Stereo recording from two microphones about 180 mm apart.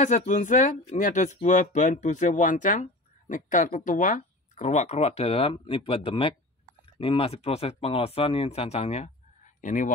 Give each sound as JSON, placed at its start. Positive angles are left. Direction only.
{"t": 0.0, "sound": "speech", "side_deg": 40}